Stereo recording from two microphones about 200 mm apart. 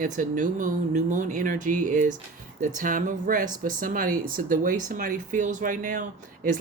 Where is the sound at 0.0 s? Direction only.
40° right (ahead or behind).